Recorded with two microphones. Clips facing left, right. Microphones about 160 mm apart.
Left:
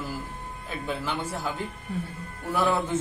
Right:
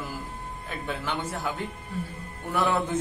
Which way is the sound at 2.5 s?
10° left (ahead or behind).